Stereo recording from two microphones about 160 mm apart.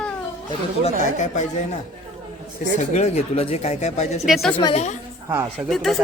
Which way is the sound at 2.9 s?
40° left (ahead or behind).